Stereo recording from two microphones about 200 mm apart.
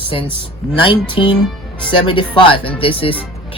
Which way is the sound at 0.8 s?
25° left (ahead or behind).